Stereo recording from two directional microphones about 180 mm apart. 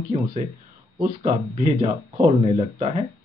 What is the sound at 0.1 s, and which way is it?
Speech, 30° right (ahead or behind).